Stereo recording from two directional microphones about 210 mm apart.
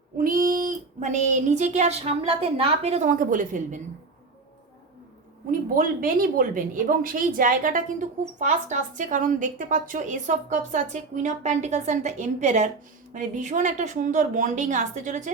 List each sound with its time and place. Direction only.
0.2 s speech: 40° right (ahead or behind)
5.5 s speech: 40° right (ahead or behind)